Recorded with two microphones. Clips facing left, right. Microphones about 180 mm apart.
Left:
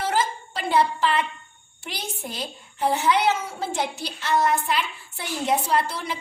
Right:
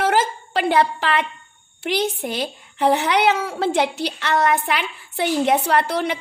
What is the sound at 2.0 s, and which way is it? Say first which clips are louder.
A woman's voice: right 8 dB; 70° right (ahead or behind).